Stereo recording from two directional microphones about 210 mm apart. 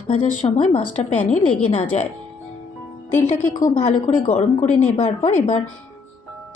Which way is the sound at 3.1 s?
35° left (ahead or behind).